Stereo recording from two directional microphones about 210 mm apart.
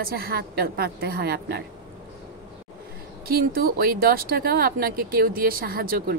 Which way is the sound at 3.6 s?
45° right (ahead or behind).